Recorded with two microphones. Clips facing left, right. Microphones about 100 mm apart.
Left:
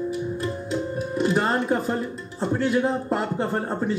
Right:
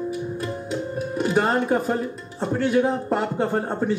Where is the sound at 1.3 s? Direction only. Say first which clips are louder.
Right 4 dB; centre (ahead or behind).